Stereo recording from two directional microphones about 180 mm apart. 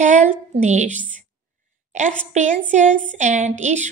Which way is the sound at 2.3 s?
40° right (ahead or behind).